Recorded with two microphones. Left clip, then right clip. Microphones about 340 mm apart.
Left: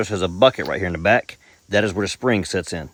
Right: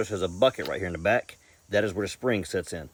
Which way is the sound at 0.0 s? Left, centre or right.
Left.